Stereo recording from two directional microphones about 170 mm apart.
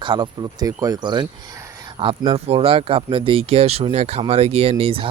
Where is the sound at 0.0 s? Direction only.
25° right (ahead or behind).